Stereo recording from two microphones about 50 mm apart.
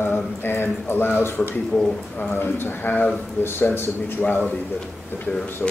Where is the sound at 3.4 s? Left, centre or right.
Left.